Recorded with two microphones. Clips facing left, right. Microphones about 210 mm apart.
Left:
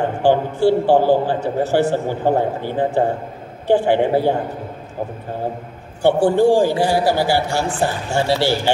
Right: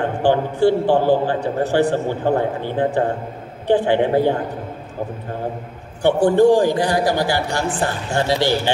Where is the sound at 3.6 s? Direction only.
15° right (ahead or behind).